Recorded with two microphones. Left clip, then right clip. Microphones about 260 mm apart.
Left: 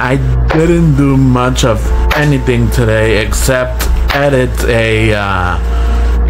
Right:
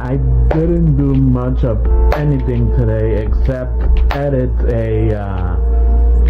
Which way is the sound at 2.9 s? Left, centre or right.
Centre.